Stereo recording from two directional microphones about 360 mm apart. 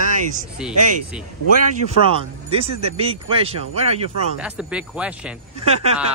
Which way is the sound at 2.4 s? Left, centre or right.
Centre.